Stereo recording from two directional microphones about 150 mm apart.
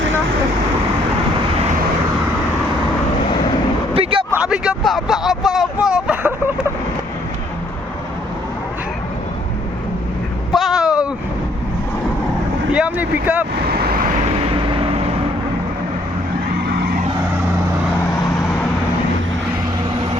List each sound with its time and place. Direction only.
3.9 s vehicle: 35° right (ahead or behind)
4.3 s vehicle: 5° right (ahead or behind)
10.5 s a sound: centre (ahead or behind)
12.7 s speech: 10° right (ahead or behind)
13.7 s vehicle: 85° right
14.5 s vehicle: 35° right (ahead or behind)